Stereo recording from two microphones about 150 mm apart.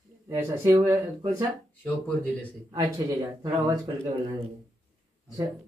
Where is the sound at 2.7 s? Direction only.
25° right (ahead or behind).